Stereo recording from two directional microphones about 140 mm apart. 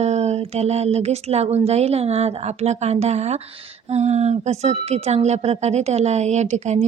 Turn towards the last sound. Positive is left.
turn(degrees=-55)  # may be behind; listen again after turning